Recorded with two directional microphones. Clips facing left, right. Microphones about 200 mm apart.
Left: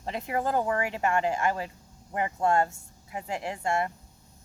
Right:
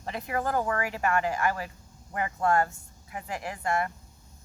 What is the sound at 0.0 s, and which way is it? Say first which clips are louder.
Speech: left 1 dB; 25° left (ahead or behind).